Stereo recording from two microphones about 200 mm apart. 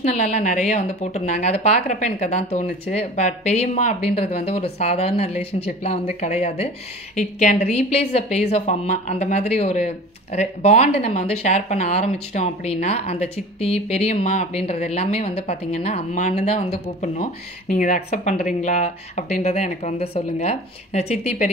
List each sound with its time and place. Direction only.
0.0 s a woman's voice: 35° left (ahead or behind)